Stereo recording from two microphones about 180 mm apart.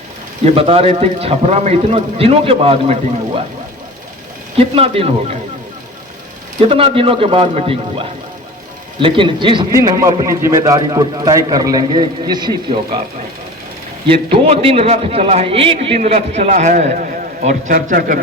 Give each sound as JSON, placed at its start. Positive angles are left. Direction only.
{"t": 0.4, "sound": "a man's voice", "side_deg": -30}
{"t": 4.5, "sound": "a man's voice", "side_deg": -30}
{"t": 6.7, "sound": "a man's voice", "side_deg": -30}
{"t": 14.1, "sound": "a man's voice", "side_deg": -30}